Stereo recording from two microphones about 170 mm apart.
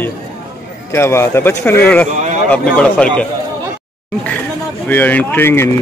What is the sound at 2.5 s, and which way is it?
Speech, 5° left (ahead or behind).